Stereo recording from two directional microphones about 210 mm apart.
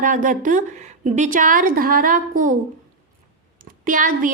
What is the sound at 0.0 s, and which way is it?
A woman's voice, 40° right (ahead or behind).